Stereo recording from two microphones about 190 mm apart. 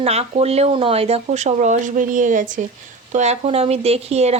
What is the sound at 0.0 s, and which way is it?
Speech, 35° right (ahead or behind).